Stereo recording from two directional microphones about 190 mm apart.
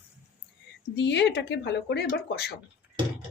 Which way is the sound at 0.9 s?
65° left (ahead or behind).